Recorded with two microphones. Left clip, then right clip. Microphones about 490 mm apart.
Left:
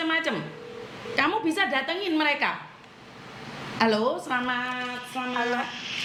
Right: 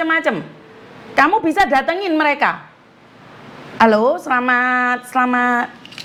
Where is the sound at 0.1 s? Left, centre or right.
Right.